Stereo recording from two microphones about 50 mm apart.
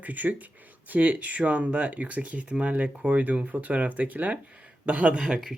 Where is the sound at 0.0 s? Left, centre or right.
Right.